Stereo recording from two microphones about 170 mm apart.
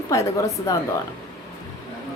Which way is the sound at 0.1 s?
20° left (ahead or behind).